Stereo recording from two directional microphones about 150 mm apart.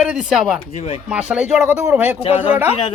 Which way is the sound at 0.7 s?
45° left (ahead or behind).